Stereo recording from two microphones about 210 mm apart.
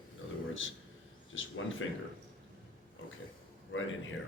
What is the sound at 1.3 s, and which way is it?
Speech, 70° left (ahead or behind).